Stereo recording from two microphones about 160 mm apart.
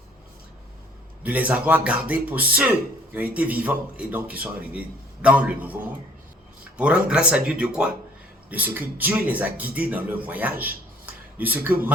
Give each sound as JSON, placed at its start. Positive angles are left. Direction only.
{"t": 1.2, "sound": "a man's voice", "side_deg": -10}